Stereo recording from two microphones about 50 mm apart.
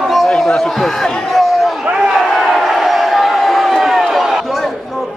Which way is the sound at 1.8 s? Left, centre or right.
Right.